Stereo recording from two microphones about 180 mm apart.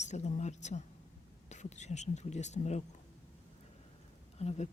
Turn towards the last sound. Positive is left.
turn(degrees=40)  # may be behind; listen again after turning